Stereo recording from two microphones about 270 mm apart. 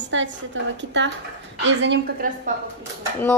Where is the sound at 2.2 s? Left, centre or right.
Right.